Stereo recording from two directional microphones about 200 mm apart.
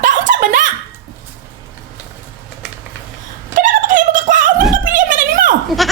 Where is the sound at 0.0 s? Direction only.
40° right (ahead or behind).